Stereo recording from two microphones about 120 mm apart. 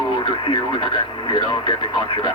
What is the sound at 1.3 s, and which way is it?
Speech, 40° left (ahead or behind).